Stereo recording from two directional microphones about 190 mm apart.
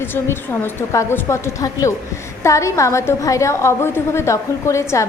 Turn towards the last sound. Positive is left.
turn(degrees=15)  # may be behind; listen again after turning